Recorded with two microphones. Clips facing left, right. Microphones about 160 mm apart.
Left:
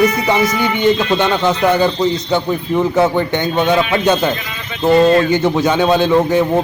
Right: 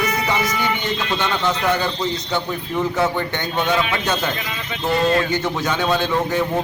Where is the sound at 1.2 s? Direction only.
20° left (ahead or behind).